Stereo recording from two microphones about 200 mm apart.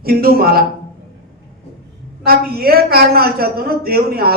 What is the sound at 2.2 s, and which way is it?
A man's voice, 50° right (ahead or behind).